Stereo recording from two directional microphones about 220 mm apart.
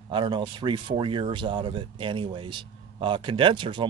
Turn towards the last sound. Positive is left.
turn(degrees=-20)  # may be behind; listen again after turning